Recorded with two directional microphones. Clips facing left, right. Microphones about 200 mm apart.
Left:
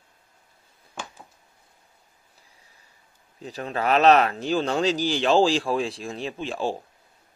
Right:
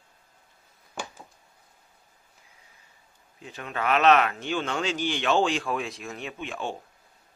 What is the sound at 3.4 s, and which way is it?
Speech, 35° left (ahead or behind).